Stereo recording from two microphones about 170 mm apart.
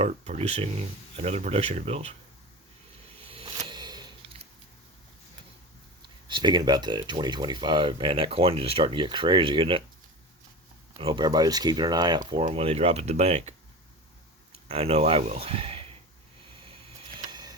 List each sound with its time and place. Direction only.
0.0 s speech: 35° right (ahead or behind)
3.2 s a sound: 30° right (ahead or behind)
6.2 s speech: 25° right (ahead or behind)
10.9 s speech: 30° right (ahead or behind)
14.7 s speech: 35° right (ahead or behind)